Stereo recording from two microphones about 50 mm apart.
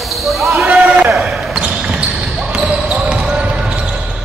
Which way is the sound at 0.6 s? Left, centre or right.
Right.